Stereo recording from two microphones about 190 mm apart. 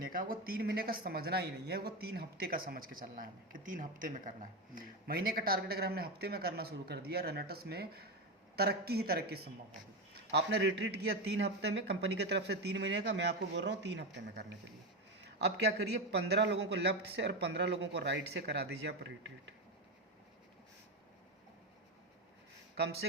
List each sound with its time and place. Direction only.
0.0 s a man's voice: 50° right (ahead or behind); by 14.4 s 65° right (ahead or behind)
15.2 s a sound: 65° right (ahead or behind)
16.1 s speech: 65° right (ahead or behind)